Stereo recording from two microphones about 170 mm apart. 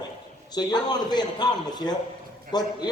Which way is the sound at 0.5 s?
25° left (ahead or behind).